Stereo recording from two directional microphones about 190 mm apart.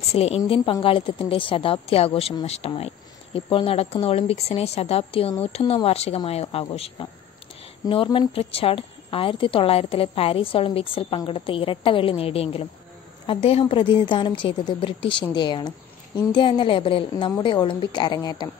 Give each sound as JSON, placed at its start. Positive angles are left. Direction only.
{"t": 0.1, "sound": "a woman's voice", "side_deg": 30}